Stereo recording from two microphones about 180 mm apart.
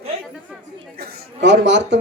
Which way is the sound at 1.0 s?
60° right (ahead or behind).